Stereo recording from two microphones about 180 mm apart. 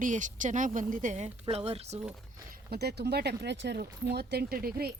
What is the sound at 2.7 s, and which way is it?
Speech, 65° right (ahead or behind).